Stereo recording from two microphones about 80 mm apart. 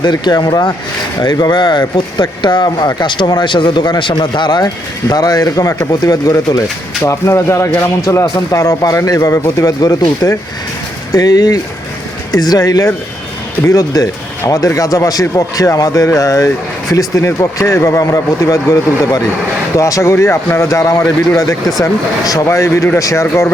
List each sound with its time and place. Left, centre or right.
0.0 s speech: left
5.0 s speech: left
7.0 s speech: left
22.2 s speech: left
22.4 s speech: left